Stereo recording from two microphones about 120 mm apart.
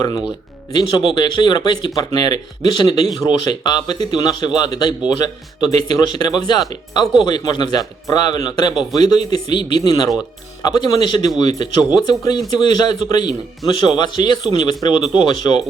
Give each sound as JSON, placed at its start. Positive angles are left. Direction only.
{"t": 0.0, "sound": "speech", "side_deg": 30}